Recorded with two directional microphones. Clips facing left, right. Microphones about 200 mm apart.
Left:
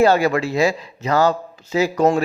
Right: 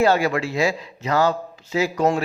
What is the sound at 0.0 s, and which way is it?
A man's voice, 40° left (ahead or behind).